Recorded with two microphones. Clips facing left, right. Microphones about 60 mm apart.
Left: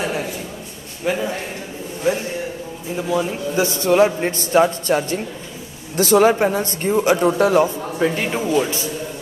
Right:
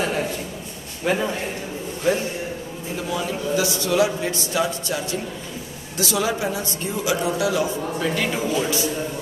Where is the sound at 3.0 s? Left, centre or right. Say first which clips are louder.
Left 4 dB; left.